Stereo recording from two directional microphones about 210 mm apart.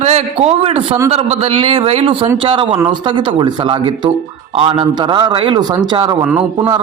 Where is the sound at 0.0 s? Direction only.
30° right (ahead or behind).